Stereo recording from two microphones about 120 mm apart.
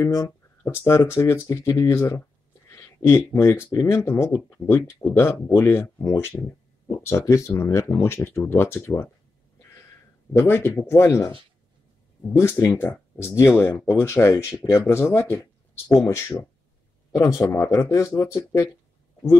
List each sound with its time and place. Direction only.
0.0 s speech: 25° left (ahead or behind)
10.3 s speech: 20° left (ahead or behind)
12.4 s speech: 25° left (ahead or behind)
17.4 s speech: 25° left (ahead or behind)